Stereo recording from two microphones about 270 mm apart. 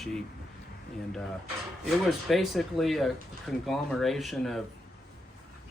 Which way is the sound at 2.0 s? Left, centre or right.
Centre.